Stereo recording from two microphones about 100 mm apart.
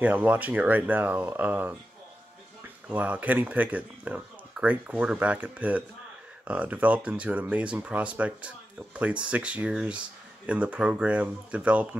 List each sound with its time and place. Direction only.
0.0 s speech: 15° right (ahead or behind)
2.9 s speech: 15° right (ahead or behind)